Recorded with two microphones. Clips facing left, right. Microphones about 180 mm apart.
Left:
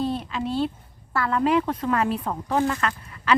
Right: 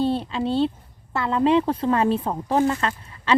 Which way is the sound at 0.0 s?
30° right (ahead or behind).